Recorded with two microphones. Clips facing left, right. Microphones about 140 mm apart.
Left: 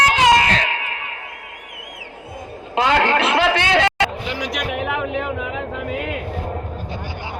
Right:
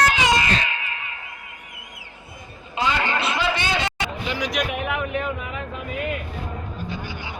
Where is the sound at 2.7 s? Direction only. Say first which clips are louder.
Left 7 dB; 85° left.